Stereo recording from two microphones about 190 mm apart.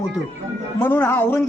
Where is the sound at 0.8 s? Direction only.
10° left (ahead or behind).